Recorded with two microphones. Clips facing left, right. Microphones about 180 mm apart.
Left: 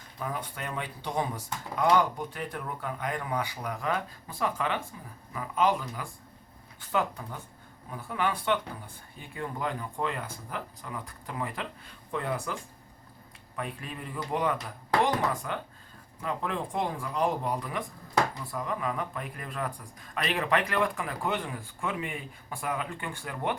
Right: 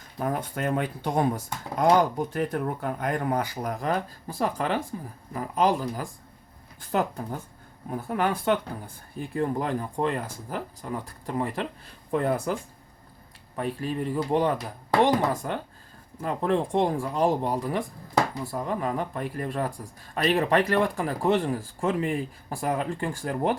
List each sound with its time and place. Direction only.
0.2 s speech: 50° right (ahead or behind)
13.6 s speech: 35° right (ahead or behind)